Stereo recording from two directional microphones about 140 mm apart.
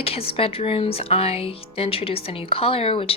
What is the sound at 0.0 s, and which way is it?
A woman's voice, 45° left (ahead or behind).